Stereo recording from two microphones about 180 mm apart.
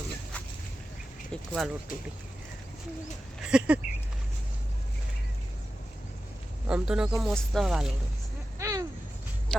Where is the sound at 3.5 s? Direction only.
5° right (ahead or behind).